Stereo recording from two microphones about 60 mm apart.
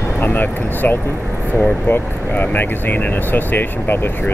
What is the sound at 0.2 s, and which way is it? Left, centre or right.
Speech, left.